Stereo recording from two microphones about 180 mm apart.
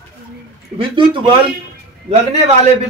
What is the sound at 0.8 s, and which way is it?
A man's voice, 25° right (ahead or behind).